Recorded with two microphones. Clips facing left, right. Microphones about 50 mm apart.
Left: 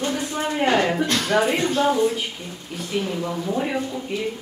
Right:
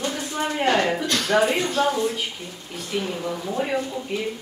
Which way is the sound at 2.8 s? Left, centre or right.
Centre.